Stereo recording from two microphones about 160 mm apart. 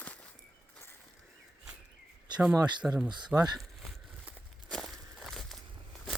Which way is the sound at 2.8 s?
5° right (ahead or behind).